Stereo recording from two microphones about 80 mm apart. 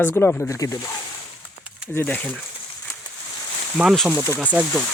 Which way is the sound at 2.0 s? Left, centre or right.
Left.